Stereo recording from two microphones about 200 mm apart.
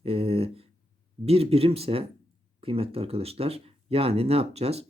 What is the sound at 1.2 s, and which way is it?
Speech, 30° right (ahead or behind).